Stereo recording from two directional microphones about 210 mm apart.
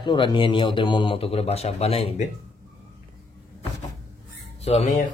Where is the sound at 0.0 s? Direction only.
20° left (ahead or behind).